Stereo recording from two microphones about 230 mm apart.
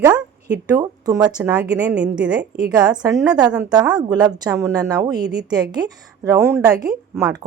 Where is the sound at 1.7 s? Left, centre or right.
Centre.